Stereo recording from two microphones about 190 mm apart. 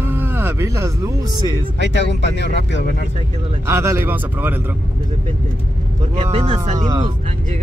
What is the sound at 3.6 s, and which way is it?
Speech, 15° right (ahead or behind).